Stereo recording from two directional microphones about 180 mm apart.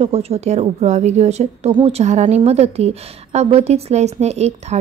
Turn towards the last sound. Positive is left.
turn(degrees=-35)  # may be behind; listen again after turning